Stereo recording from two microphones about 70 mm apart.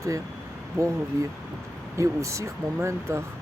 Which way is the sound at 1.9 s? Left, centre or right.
Right.